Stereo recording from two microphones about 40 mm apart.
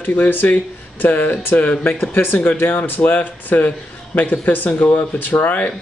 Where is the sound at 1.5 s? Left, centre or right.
Left.